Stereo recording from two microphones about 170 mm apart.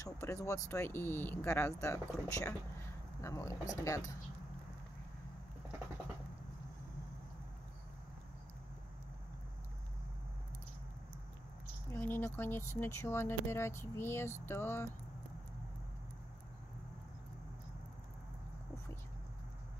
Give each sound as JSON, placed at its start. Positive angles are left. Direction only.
{"t": 0.0, "sound": "speech", "side_deg": 15}
{"t": 11.9, "sound": "speech", "side_deg": 15}